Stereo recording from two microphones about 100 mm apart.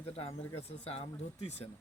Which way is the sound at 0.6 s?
90° left.